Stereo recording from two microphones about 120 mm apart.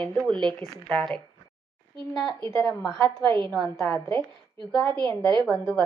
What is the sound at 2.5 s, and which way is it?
Speech, 5° left (ahead or behind).